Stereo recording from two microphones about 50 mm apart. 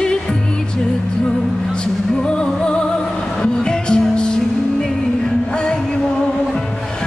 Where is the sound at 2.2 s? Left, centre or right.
Centre.